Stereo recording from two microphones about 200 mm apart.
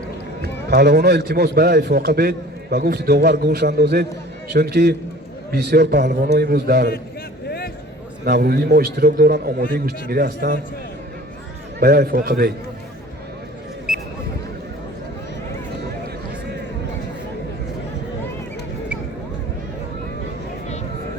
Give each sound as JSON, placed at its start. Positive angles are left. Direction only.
{"t": 0.7, "sound": "a man's voice", "side_deg": -55}
{"t": 8.2, "sound": "a man's voice", "side_deg": -55}
{"t": 11.8, "sound": "a man's voice", "side_deg": -50}